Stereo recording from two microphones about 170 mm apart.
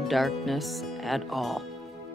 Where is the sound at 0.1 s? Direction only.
Centre (ahead or behind).